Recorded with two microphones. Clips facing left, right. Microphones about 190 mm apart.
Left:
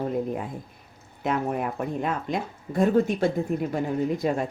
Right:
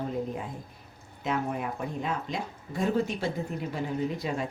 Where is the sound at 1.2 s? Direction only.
55° left (ahead or behind).